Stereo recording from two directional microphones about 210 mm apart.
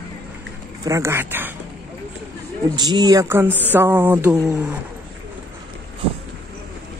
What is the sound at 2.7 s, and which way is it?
Speech, 20° right (ahead or behind).